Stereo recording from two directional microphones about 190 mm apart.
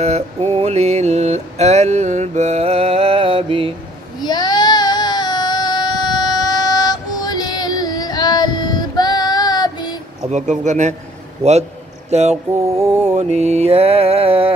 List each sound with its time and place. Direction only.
0.0 s mantra: 35° right (ahead or behind)
4.2 s a sound: 20° left (ahead or behind)
10.3 s mantra: 40° right (ahead or behind)
12.1 s mantra: 35° right (ahead or behind)